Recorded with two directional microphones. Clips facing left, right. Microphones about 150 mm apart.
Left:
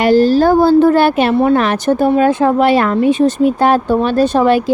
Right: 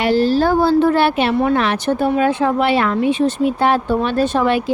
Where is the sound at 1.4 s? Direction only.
40° left (ahead or behind).